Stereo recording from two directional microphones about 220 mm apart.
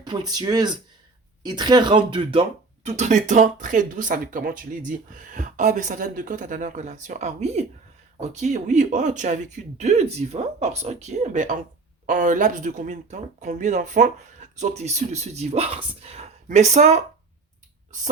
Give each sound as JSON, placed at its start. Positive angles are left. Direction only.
{"t": 0.0, "sound": "speech", "side_deg": -15}